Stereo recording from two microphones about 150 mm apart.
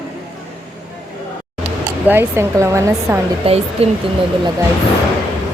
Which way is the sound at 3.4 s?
40° right (ahead or behind).